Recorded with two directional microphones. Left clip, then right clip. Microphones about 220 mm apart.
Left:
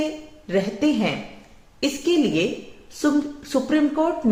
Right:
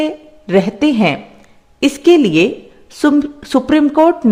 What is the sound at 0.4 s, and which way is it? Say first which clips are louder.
Speech: right 9 dB; 50° right (ahead or behind).